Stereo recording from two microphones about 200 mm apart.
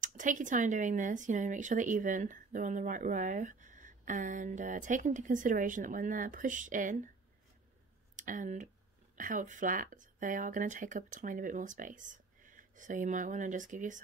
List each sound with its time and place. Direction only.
0.0 s speech: 40° right (ahead or behind)
8.2 s speech: 40° right (ahead or behind)